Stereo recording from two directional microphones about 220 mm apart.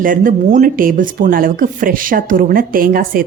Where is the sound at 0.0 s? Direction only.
40° right (ahead or behind).